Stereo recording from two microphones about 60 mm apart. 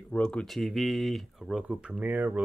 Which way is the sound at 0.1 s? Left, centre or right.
Centre.